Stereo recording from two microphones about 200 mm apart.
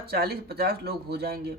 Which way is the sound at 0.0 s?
50° right (ahead or behind).